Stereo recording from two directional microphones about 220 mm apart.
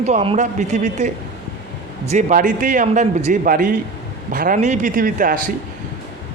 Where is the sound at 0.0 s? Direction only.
30° right (ahead or behind).